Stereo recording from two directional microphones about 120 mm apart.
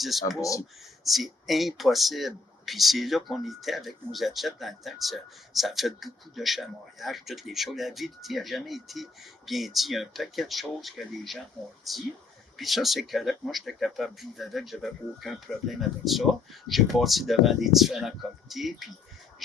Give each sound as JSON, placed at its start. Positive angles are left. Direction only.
{"t": 0.0, "sound": "speech", "side_deg": 0}
{"t": 0.3, "sound": "speech", "side_deg": 30}
{"t": 1.0, "sound": "speech", "side_deg": 0}